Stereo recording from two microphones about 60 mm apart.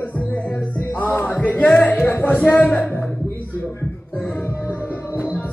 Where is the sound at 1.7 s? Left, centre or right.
Centre.